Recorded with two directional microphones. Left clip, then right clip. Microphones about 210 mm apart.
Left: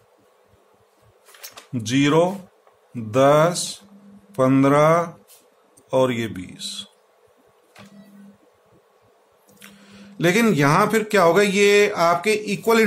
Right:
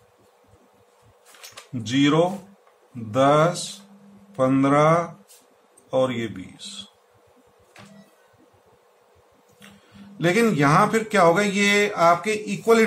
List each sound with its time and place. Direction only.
1.7 s speech: 40° left (ahead or behind)
10.1 s speech: 45° left (ahead or behind)